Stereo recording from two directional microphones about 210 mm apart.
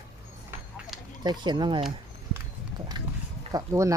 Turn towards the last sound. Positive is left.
turn(degrees=-15)  # may be behind; listen again after turning